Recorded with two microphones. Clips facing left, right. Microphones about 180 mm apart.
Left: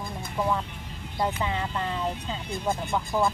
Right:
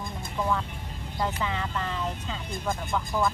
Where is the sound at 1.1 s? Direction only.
25° left (ahead or behind).